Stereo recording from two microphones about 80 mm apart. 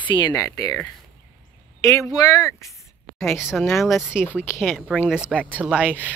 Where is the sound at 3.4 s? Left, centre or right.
Centre.